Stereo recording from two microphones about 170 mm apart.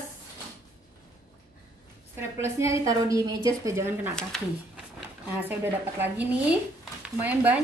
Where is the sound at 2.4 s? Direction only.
20° right (ahead or behind).